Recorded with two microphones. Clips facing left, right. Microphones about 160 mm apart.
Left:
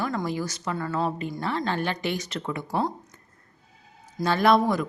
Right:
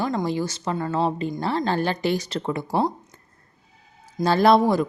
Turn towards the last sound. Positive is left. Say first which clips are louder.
# right 4 dB
turn(degrees=-30)  # may be behind; listen again after turning